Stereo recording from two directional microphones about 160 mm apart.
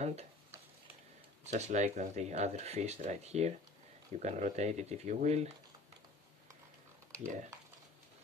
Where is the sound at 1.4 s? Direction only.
45° right (ahead or behind).